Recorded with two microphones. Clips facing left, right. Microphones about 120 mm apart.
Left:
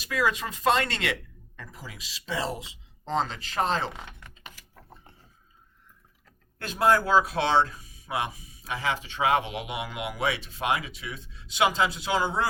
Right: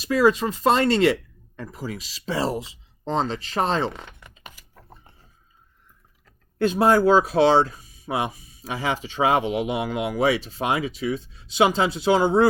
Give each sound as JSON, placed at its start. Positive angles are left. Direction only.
{"t": 0.0, "sound": "speech", "side_deg": -30}
{"t": 6.8, "sound": "speech", "side_deg": -20}
{"t": 7.3, "sound": "speech", "side_deg": -35}